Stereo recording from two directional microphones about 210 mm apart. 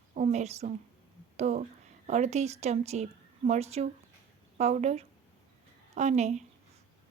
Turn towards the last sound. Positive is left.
turn(degrees=-35)  # may be behind; listen again after turning